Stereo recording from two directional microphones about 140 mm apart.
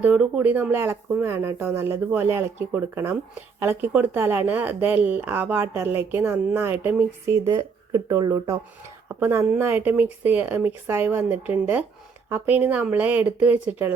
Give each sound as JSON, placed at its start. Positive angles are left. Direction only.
{"t": 0.0, "sound": "speech", "side_deg": -10}